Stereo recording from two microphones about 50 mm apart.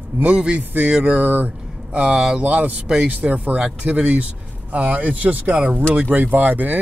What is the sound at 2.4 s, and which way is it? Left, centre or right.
A man's voice, right.